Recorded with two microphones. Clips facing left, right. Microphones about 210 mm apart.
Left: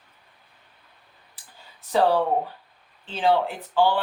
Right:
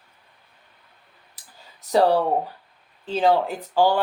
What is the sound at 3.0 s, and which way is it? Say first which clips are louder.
Speech: right 2 dB; 40° right (ahead or behind).